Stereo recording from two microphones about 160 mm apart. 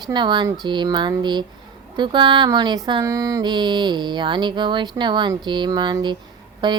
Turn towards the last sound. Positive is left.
turn(degrees=-30)  # may be behind; listen again after turning